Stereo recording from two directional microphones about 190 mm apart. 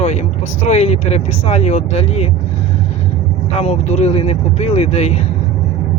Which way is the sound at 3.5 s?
35° left (ahead or behind).